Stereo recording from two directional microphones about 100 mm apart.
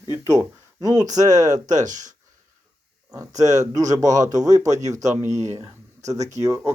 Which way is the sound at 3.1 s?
35° right (ahead or behind).